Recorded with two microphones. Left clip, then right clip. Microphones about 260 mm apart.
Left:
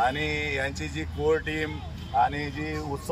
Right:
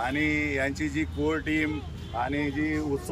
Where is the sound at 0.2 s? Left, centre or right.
Left.